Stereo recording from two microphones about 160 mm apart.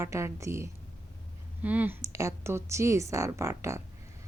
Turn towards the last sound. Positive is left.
turn(degrees=-15)  # may be behind; listen again after turning